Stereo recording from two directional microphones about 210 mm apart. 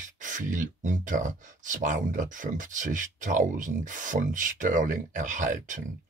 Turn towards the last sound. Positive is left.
turn(degrees=-35)  # may be behind; listen again after turning